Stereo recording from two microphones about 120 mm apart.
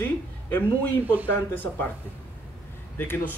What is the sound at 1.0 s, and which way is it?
Speech, 15° right (ahead or behind).